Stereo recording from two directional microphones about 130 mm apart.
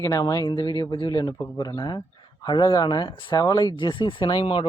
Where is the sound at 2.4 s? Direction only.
35° left (ahead or behind).